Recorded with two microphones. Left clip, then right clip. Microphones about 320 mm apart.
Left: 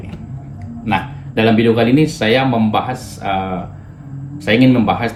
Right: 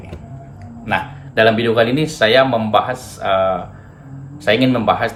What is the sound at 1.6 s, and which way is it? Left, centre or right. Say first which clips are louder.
Speech: left 2 dB; centre.